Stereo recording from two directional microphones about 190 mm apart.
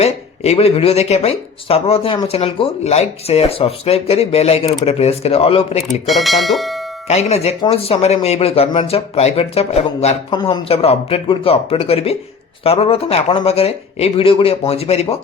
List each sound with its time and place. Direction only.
0.0 s speech: 30° left (ahead or behind)
5.9 s speech: centre (ahead or behind)
7.1 s speech: 35° left (ahead or behind)